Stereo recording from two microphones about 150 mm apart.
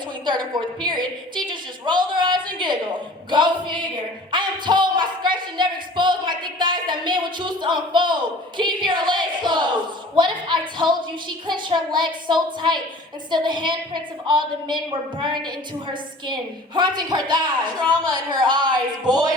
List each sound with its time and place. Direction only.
0.3 s a woman's voice: 30° right (ahead or behind)